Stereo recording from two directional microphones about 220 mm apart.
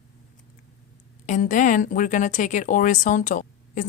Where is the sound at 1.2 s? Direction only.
35° left (ahead or behind).